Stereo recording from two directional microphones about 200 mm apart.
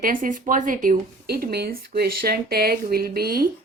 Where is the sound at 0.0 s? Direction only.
45° right (ahead or behind).